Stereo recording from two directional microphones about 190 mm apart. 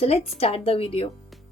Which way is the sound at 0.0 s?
30° left (ahead or behind).